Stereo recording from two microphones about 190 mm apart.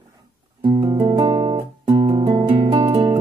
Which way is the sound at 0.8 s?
20° right (ahead or behind).